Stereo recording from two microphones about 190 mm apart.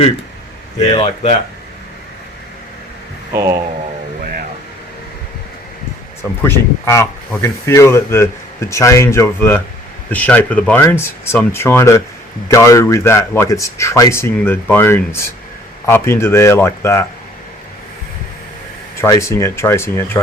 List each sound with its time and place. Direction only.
0.8 s speech: 35° left (ahead or behind)
3.3 s speech: 15° right (ahead or behind)
6.4 s speech: 15° left (ahead or behind)
18.9 s speech: 15° left (ahead or behind)